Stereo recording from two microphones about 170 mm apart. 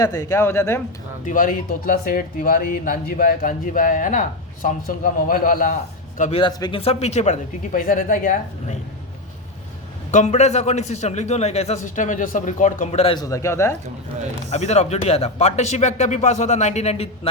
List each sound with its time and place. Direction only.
0.0 s speech: 20° left (ahead or behind)
1.2 s speech: 50° left (ahead or behind)
6.3 s a man's voice: 25° left (ahead or behind); by 8.8 s 45° left (ahead or behind)
10.1 s a man's voice: 45° left (ahead or behind)
13.1 s speech: 20° left (ahead or behind)
14.5 s a man's voice: 40° left (ahead or behind)